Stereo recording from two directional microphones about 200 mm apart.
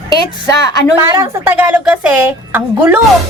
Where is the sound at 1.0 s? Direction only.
15° right (ahead or behind).